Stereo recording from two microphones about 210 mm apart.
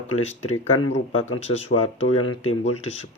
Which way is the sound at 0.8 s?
60° left (ahead or behind).